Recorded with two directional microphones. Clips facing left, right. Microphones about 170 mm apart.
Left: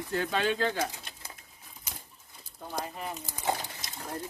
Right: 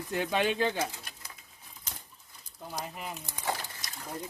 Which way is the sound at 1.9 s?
10° left (ahead or behind).